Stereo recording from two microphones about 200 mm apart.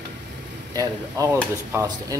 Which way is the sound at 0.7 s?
15° right (ahead or behind).